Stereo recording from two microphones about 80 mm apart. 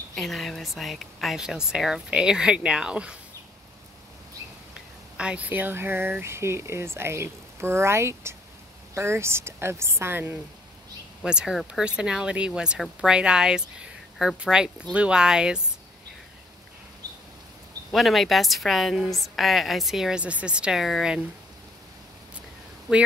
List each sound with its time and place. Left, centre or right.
0.1 s speech: centre
5.1 s speech: centre
11.2 s speech: centre
17.9 s speech: centre